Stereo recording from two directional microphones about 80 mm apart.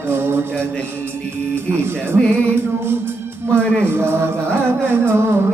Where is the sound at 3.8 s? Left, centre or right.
Right.